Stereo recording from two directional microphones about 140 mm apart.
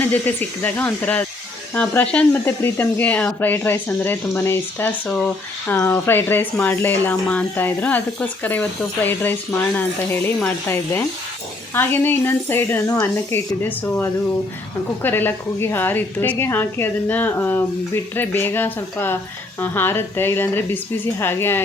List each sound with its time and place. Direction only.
0.0 s speech: 10° left (ahead or behind)